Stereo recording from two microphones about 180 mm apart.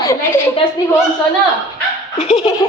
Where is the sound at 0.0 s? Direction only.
15° left (ahead or behind).